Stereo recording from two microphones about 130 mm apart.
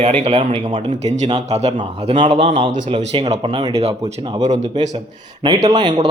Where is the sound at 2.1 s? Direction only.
45° right (ahead or behind).